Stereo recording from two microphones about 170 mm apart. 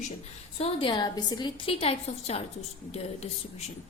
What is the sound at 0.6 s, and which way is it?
A woman's voice, 30° left (ahead or behind).